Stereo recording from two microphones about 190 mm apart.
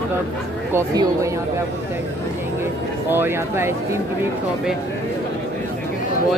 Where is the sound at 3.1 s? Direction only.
10° right (ahead or behind).